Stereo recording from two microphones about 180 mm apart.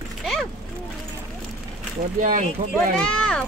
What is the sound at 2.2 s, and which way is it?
Speech, 45° right (ahead or behind).